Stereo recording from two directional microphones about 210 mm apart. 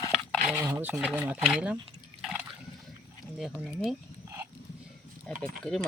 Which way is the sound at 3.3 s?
Centre (ahead or behind).